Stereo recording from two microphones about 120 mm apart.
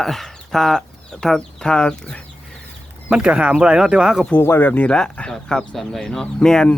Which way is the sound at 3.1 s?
10° right (ahead or behind).